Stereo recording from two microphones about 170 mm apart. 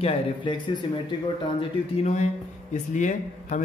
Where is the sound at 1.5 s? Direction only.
40° left (ahead or behind).